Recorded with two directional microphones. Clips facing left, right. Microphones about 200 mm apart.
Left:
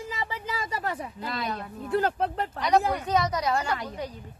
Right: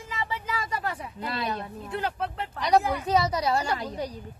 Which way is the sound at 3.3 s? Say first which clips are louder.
Right 1 dB; 30° right (ahead or behind).